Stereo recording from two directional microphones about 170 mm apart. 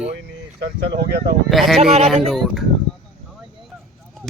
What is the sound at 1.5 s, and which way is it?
Speech, centre (ahead or behind).